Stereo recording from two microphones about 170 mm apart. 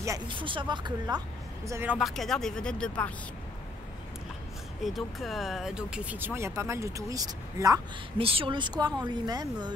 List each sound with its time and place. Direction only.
0.0 s speech: 25° right (ahead or behind)
1.7 s speech: 15° right (ahead or behind)
2.0 s speech: centre (ahead or behind)
4.8 s speech: centre (ahead or behind); by 7.8 s 20° right (ahead or behind)
8.2 s speech: 35° right (ahead or behind)